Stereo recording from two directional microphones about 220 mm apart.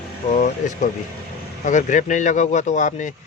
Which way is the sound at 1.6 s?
35° left (ahead or behind).